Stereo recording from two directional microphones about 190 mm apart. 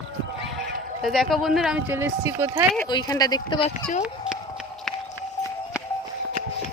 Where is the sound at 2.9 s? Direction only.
20° left (ahead or behind).